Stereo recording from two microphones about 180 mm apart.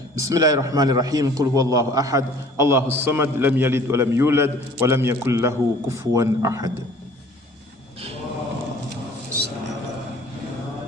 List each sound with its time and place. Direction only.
0.2 s a man's voice: 20° right (ahead or behind)